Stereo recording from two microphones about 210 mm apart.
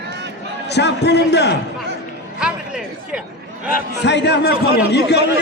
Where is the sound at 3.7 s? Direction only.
55° left (ahead or behind).